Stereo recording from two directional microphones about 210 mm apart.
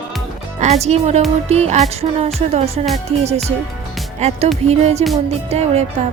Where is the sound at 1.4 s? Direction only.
30° right (ahead or behind).